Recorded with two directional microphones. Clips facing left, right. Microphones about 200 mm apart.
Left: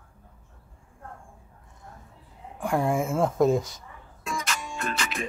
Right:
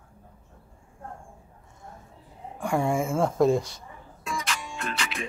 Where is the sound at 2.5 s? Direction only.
Centre (ahead or behind).